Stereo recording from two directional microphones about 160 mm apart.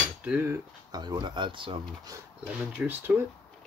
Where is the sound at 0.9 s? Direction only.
25° right (ahead or behind).